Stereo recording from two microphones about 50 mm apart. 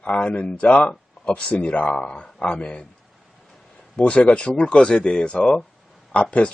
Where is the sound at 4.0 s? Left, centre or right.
Left.